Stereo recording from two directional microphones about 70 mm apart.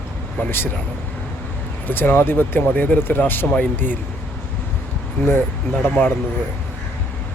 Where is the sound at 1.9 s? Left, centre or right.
Left.